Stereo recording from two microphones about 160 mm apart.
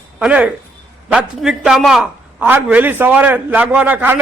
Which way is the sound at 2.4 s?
10° right (ahead or behind).